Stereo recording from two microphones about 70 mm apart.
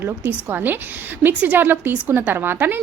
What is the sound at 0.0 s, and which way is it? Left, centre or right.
A woman's voice, right.